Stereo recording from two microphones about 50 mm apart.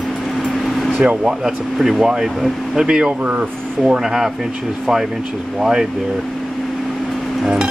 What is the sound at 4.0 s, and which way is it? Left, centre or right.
Speech, centre.